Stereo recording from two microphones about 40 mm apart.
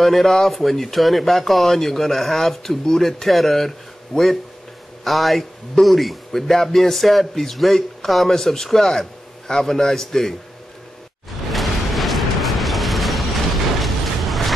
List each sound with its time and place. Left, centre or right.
0.0 s a man's voice: centre
11.5 s a sound: centre
13.7 s vehicle: centre